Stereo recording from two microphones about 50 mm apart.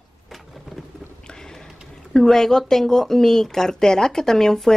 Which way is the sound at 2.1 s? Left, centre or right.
Centre.